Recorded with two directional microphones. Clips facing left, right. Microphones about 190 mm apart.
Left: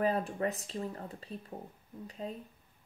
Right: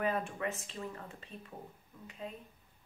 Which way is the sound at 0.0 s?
35° left (ahead or behind).